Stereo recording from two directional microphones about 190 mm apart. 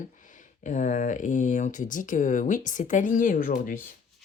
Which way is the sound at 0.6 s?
40° left (ahead or behind).